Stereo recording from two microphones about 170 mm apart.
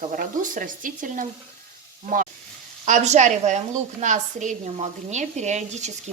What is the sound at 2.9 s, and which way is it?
A woman's voice, 45° right (ahead or behind).